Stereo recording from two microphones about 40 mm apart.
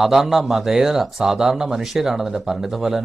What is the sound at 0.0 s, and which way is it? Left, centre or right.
Speech, centre.